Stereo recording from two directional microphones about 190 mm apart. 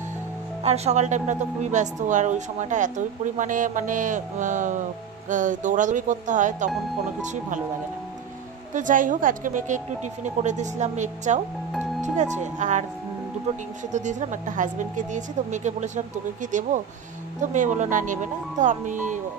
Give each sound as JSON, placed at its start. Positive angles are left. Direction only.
{"t": 0.7, "sound": "a woman's voice", "side_deg": -35}
{"t": 8.7, "sound": "a man's voice", "side_deg": -45}
{"t": 13.9, "sound": "a woman's voice", "side_deg": -40}